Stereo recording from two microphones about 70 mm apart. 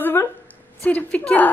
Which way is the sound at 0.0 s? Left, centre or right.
Left.